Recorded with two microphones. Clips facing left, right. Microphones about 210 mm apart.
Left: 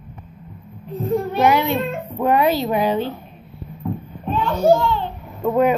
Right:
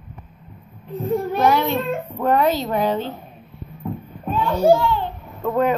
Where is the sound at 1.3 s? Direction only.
10° left (ahead or behind).